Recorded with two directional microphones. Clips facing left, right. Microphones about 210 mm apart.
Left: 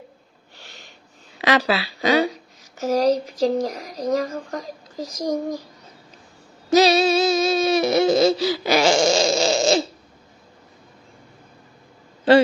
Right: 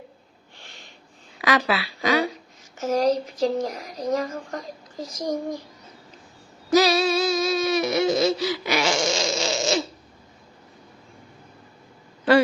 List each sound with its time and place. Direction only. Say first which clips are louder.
1.4 s speech: left 3 dB; 30° left (ahead or behind)
6.7 s music: left 3 dB; 25° left (ahead or behind)